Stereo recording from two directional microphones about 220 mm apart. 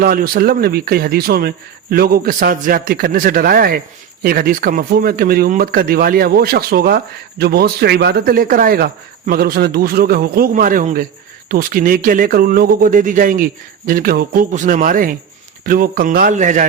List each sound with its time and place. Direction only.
0.0 s speech: 40° right (ahead or behind)